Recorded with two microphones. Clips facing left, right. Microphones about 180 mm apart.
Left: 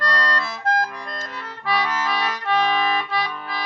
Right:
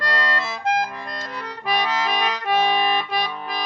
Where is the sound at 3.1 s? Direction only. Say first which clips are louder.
Right 1 dB; 15° right (ahead or behind).